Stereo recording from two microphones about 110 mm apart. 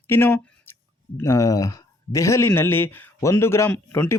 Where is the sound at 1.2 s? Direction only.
30° left (ahead or behind).